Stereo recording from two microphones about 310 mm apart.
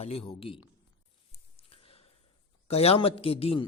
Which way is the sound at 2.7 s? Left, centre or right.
Centre.